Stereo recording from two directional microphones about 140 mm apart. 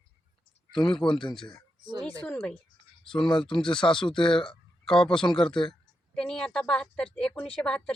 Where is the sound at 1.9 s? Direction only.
35° right (ahead or behind).